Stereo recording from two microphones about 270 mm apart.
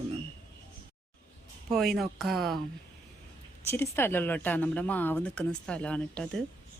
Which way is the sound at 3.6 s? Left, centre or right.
Centre.